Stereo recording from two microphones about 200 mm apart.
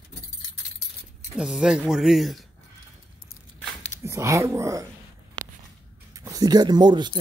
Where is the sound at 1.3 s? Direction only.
5° right (ahead or behind).